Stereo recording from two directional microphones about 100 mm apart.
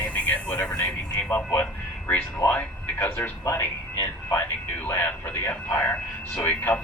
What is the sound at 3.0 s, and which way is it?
Speech, 25° left (ahead or behind).